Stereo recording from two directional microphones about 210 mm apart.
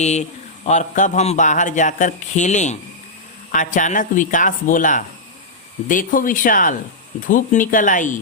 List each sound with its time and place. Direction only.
0.0 s speech: 35° left (ahead or behind)